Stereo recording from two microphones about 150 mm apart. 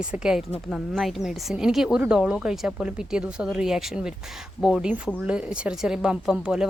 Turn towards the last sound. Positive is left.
turn(degrees=-5)  # may be behind; listen again after turning